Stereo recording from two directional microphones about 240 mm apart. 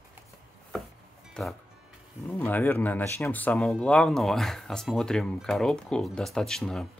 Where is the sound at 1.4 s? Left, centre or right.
Centre.